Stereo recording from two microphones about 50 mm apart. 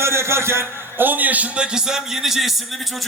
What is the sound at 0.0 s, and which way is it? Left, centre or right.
A man's voice, right.